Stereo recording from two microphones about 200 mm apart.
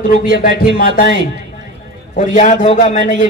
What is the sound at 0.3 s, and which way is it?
Music, 50° left (ahead or behind).